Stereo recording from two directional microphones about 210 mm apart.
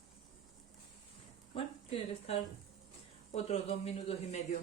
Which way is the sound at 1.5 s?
30° left (ahead or behind).